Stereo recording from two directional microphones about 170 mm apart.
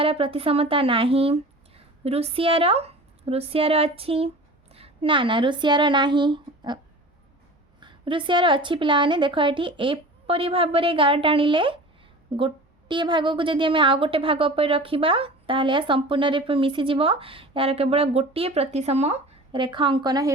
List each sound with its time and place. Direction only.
0.0 s a woman's voice: 35° right (ahead or behind)
7.8 s a woman's voice: 30° right (ahead or behind)